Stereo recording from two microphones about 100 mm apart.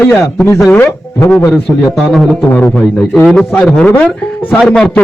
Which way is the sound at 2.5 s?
15° left (ahead or behind).